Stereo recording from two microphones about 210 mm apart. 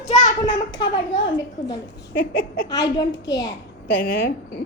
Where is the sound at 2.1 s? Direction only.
45° left (ahead or behind).